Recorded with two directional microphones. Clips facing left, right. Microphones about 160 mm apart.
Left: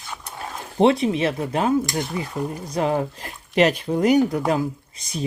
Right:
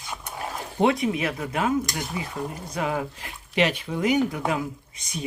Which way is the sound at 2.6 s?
35° left (ahead or behind).